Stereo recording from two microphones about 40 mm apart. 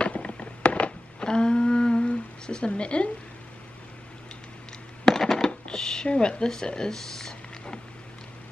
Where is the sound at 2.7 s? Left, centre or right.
Left.